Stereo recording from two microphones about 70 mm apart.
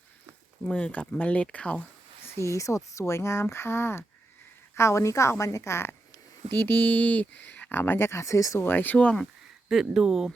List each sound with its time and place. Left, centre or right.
0.7 s speech: left
2.2 s a woman's voice: left
6.5 s speech: left
8.6 s speech: left
9.6 s speech: centre